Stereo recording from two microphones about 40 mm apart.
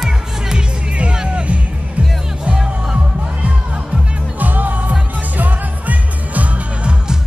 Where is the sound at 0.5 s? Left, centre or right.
Right.